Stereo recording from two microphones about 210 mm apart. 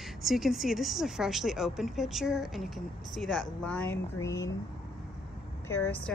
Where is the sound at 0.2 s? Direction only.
Centre (ahead or behind).